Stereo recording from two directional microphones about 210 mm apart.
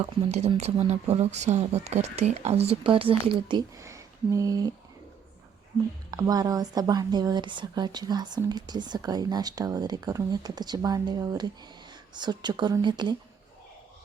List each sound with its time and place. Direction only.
0.0 s speech: 30° right (ahead or behind)
3.8 s speech: 15° right (ahead or behind)
6.1 s speech: 15° right (ahead or behind)